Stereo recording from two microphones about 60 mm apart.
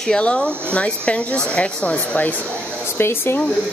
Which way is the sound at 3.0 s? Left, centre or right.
Left.